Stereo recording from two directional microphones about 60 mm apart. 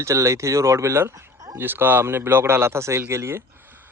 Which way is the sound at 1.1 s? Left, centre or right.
Right.